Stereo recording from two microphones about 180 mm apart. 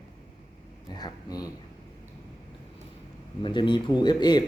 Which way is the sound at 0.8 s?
25° left (ahead or behind).